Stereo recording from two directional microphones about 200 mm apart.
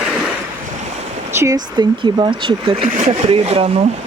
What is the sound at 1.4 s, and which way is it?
Speech, 20° right (ahead or behind).